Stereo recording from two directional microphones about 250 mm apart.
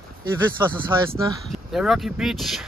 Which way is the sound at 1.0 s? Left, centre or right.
Centre.